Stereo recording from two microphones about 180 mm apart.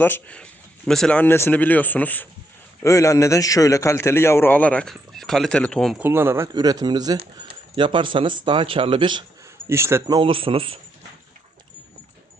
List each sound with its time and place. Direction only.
0.0 s a man's voice: 10° left (ahead or behind)
6.0 s speech: 10° right (ahead or behind)
9.6 s speech: 15° right (ahead or behind)
10.2 s speech: 30° right (ahead or behind)